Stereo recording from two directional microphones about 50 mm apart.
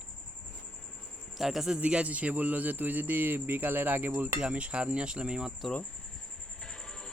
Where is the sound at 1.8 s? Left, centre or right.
Right.